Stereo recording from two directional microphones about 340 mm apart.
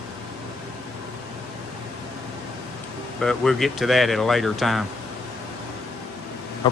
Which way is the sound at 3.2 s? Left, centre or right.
Centre.